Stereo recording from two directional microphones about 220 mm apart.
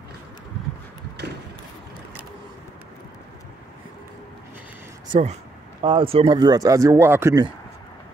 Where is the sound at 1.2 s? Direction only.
50° right (ahead or behind).